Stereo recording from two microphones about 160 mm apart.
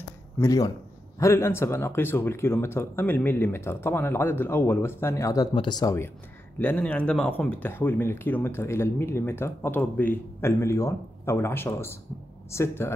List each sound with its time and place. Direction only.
0.4 s speech: 20° left (ahead or behind)